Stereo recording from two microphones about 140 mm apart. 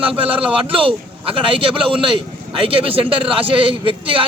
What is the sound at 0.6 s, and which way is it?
A man's voice, 40° right (ahead or behind).